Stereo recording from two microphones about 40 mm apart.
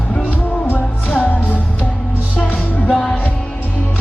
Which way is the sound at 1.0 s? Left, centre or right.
Left.